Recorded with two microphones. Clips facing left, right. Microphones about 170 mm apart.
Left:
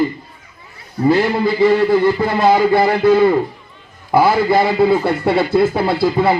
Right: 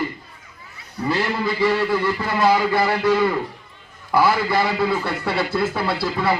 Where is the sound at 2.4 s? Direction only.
30° left (ahead or behind).